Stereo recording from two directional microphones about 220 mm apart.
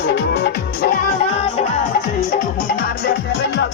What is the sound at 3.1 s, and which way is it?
Music, 50° left (ahead or behind).